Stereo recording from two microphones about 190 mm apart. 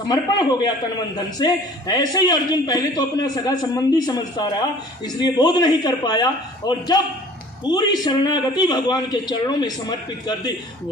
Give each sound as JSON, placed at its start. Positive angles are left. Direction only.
{"t": 0.1, "sound": "a man's voice", "side_deg": 20}